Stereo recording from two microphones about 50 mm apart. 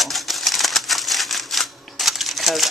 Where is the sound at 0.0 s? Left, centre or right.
Centre.